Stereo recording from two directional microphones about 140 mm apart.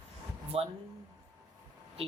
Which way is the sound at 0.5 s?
45° right (ahead or behind).